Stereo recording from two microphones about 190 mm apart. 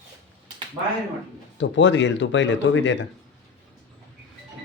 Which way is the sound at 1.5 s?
75° left (ahead or behind).